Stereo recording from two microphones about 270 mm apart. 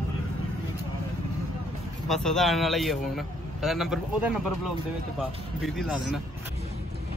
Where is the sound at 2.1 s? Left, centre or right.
Centre.